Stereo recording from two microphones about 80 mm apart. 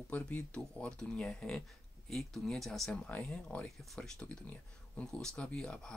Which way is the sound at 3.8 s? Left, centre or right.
Centre.